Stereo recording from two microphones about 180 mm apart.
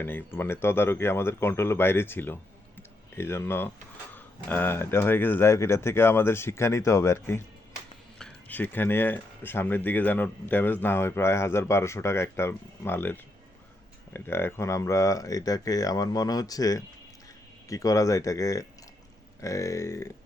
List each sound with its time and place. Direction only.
0.0 s speech: 10° left (ahead or behind)